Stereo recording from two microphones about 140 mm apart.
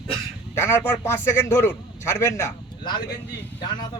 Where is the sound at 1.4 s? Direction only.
15° left (ahead or behind).